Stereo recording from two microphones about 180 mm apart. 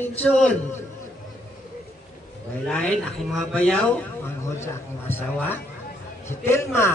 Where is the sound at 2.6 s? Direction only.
5° left (ahead or behind).